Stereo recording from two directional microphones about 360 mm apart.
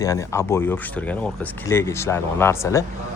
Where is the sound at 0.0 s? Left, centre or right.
Centre.